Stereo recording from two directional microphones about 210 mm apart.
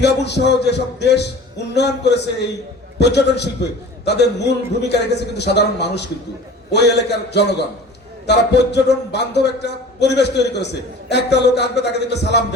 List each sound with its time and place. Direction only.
0.0 s a man's voice: 55° left (ahead or behind)